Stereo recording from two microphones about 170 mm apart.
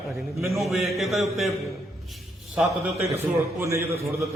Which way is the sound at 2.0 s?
Centre (ahead or behind).